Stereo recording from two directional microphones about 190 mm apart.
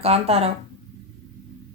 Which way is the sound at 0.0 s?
30° right (ahead or behind).